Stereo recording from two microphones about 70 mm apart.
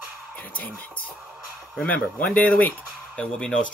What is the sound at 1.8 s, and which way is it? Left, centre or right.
Speech, left.